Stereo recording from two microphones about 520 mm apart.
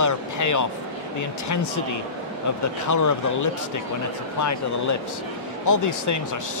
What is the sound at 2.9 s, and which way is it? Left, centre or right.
Speech, left.